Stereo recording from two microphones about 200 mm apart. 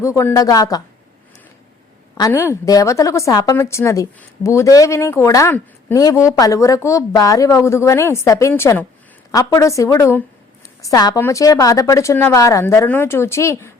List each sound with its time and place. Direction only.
0.0 s a woman's voice: 15° left (ahead or behind)
2.4 s a woman's voice: 15° left (ahead or behind)